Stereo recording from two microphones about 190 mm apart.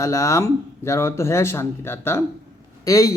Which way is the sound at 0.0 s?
15° left (ahead or behind).